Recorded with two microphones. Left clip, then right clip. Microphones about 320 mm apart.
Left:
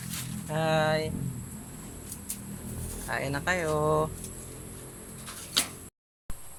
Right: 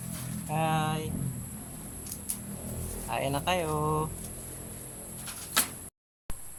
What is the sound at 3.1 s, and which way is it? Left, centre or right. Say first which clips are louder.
Speech: even; centre.